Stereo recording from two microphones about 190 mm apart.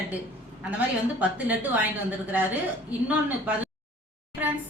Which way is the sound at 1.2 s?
10° right (ahead or behind).